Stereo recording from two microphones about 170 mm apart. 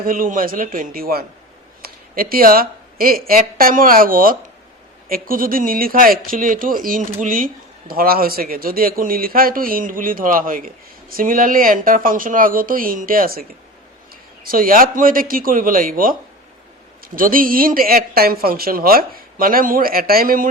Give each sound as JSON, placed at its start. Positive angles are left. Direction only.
{"t": 0.0, "sound": "speech", "side_deg": -55}